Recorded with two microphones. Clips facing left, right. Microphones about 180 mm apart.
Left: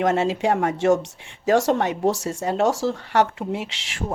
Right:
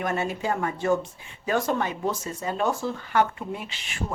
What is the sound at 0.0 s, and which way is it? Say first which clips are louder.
A woman's voice: left 7 dB; 90° left.